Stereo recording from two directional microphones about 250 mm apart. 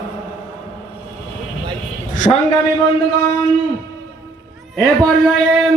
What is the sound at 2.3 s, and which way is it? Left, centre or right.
Speech, centre.